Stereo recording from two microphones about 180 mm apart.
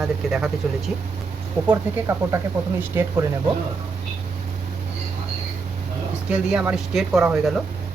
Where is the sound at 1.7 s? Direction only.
15° right (ahead or behind).